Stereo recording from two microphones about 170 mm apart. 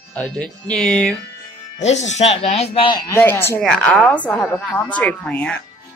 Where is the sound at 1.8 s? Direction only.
40° left (ahead or behind).